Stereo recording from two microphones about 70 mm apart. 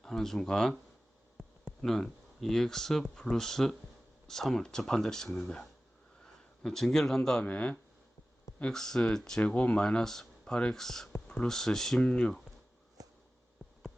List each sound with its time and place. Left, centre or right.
0.0 s speech: centre
1.4 s a sound: centre
1.8 s a man's voice: centre
7.4 s speech: centre
8.7 s speech: centre
13.6 s a sound: centre